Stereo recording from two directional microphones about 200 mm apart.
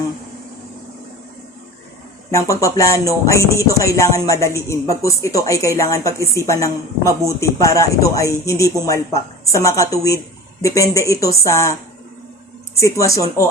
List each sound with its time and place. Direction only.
2.3 s speech: 15° left (ahead or behind)
12.8 s speech: 15° left (ahead or behind)